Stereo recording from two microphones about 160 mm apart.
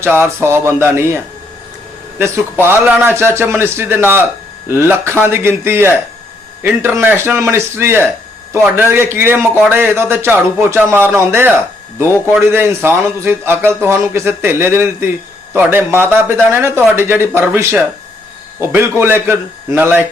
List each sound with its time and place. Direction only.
0.0 s a man's voice: 15° right (ahead or behind)
12.0 s a man's voice: 15° left (ahead or behind)
12.3 s a man's voice: 15° right (ahead or behind)